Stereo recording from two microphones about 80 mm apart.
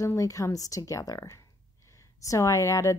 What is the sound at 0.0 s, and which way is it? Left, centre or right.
Speech, left.